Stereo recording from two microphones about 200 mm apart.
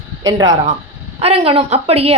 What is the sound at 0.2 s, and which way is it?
Speech, 20° right (ahead or behind).